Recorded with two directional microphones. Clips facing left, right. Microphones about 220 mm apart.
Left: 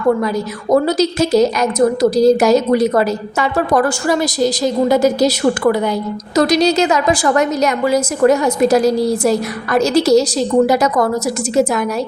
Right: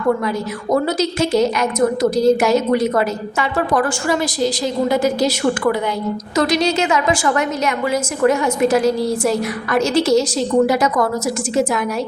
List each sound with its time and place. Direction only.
0.7 s a woman's voice: 35° left (ahead or behind)